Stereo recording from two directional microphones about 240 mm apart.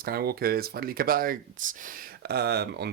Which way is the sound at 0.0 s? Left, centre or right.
Right.